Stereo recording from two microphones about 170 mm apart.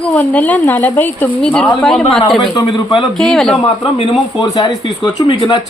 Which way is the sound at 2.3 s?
25° left (ahead or behind).